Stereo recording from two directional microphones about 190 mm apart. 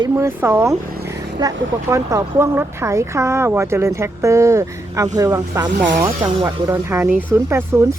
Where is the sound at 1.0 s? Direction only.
15° right (ahead or behind).